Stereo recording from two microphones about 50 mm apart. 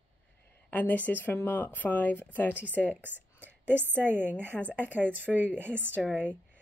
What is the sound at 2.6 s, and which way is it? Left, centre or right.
A woman's voice, right.